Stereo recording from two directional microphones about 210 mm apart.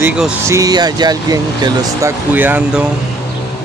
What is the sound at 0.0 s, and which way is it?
Speech, 5° right (ahead or behind).